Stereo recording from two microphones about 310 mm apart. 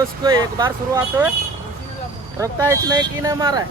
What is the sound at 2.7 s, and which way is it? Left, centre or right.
Speech, centre.